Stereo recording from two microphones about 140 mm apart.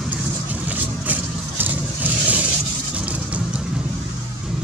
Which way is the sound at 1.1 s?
10° right (ahead or behind).